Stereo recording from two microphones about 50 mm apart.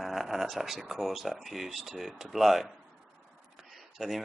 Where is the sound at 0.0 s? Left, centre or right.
Centre.